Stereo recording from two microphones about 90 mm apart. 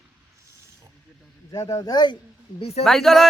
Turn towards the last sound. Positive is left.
turn(degrees=0)  # may be behind; listen again after turning